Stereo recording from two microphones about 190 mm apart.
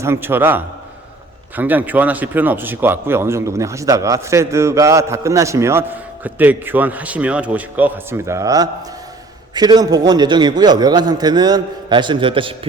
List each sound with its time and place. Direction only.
0.0 s a man's voice: 10° right (ahead or behind); by 12.5 s 25° right (ahead or behind)